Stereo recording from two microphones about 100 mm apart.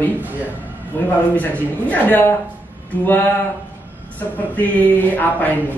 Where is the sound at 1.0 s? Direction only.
25° left (ahead or behind).